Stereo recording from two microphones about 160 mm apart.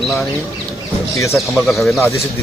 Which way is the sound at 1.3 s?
Centre (ahead or behind).